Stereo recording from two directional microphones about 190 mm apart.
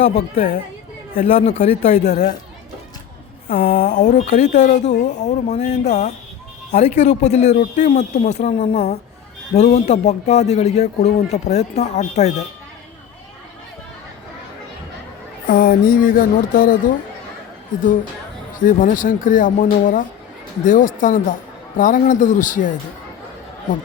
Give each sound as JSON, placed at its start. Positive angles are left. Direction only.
{"t": 0.0, "sound": "speech", "side_deg": 35}
{"t": 3.5, "sound": "speech", "side_deg": 40}
{"t": 15.4, "sound": "speech", "side_deg": 45}
{"t": 18.6, "sound": "speech", "side_deg": 45}